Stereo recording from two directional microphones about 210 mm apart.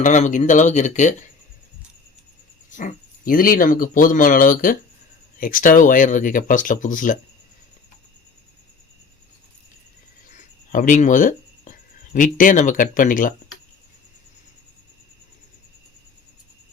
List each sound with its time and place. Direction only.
0.0 s speech: 35° left (ahead or behind)
2.6 s speech: 35° left (ahead or behind)
10.7 s speech: 40° left (ahead or behind)